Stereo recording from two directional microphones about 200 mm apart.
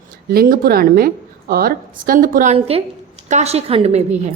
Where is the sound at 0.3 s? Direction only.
50° right (ahead or behind); by 4.0 s 30° right (ahead or behind).